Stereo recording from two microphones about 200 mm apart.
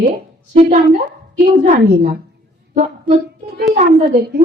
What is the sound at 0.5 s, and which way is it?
Speech, 35° right (ahead or behind).